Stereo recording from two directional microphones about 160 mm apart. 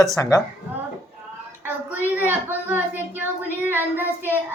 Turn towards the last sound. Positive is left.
turn(degrees=-10)  # may be behind; listen again after turning